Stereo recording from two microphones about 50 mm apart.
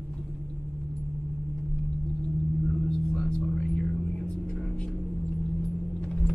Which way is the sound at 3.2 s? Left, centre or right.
Centre.